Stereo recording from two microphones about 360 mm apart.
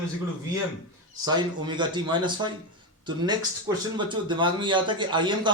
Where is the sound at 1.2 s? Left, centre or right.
Centre.